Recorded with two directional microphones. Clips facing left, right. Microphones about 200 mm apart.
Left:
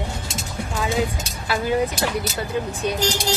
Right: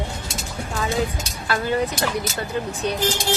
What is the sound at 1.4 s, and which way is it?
A woman's voice, 10° left (ahead or behind).